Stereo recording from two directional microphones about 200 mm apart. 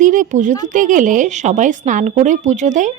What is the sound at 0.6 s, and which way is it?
A woman's voice, 40° right (ahead or behind).